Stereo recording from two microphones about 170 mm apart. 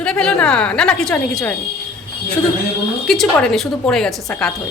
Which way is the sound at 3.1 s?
Centre (ahead or behind).